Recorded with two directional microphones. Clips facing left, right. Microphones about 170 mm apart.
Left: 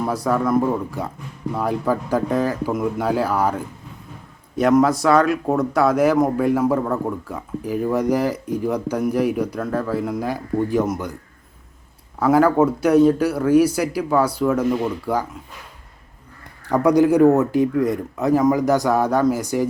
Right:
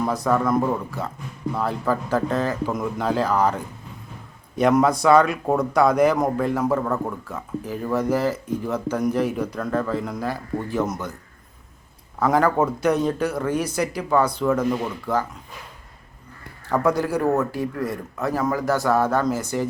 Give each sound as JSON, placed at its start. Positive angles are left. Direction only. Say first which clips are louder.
{"t": 0.0, "sound": "a man's voice", "louder": "left 1 dB", "side_deg": 10}
{"t": 12.2, "sound": "speech", "louder": "left 4 dB", "side_deg": 5}
{"t": 16.6, "sound": "speech", "louder": "left 6 dB", "side_deg": 15}